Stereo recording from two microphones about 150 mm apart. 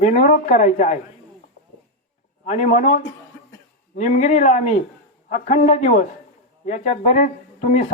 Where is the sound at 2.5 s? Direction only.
50° left (ahead or behind).